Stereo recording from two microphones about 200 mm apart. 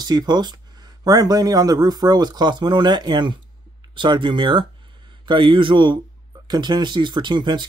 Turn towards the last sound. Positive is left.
turn(degrees=-20)  # may be behind; listen again after turning